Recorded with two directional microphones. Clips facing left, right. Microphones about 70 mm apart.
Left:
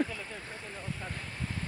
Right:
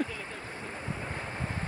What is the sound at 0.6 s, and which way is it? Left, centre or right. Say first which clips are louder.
Boat: right 4 dB; right.